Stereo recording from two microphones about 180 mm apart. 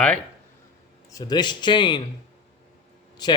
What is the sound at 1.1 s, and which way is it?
Speech, 20° left (ahead or behind).